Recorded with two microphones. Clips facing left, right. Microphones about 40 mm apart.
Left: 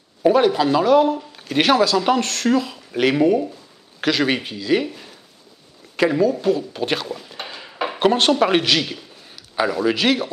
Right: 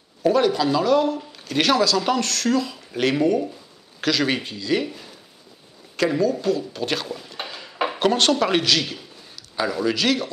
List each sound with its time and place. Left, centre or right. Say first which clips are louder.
0.2 s speech: left 3 dB; centre
7.1 s dishes: left 1 dB; centre
8.1 s speech: left 3 dB; centre
9.3 s a sound: left 4 dB; centre
9.8 s speech: left 1 dB; centre